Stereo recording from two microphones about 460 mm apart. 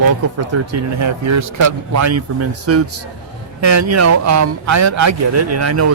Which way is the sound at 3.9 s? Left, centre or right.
Right.